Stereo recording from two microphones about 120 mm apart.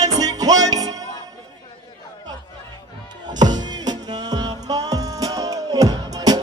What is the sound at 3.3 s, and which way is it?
Music, 35° right (ahead or behind).